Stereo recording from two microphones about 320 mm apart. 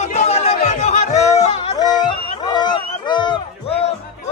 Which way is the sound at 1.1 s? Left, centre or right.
Centre.